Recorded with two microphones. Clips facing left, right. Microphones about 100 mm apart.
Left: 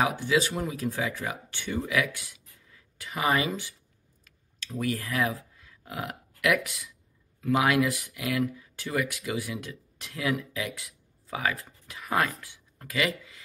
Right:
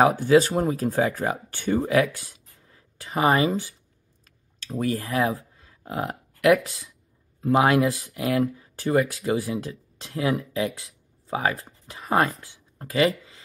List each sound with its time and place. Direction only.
0.0 s speech: 40° right (ahead or behind)
4.2 s a sound: 35° right (ahead or behind)
7.4 s speech: 30° right (ahead or behind)